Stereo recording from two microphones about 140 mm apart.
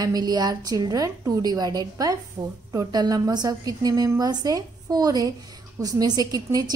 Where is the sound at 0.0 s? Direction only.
30° right (ahead or behind).